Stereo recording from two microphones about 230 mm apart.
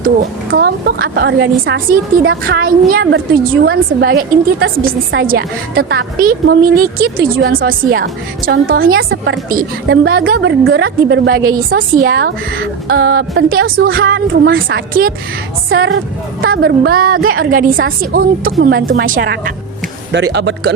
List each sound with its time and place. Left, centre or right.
0.5 s a woman's voice: right
15.7 s speech: right
16.5 s a woman's voice: right
20.1 s a woman's voice: right